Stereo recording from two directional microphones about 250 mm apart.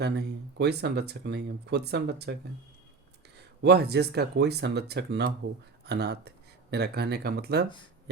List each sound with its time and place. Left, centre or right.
0.0 s speech: right
3.6 s speech: right